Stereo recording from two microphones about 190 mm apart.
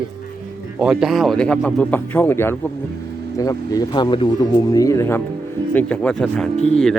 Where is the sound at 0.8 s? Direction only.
5° right (ahead or behind).